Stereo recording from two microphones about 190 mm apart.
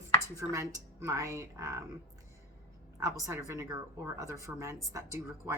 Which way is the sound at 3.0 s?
15° right (ahead or behind).